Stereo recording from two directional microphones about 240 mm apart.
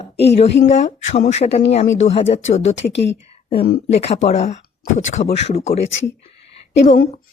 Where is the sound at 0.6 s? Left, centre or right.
Left.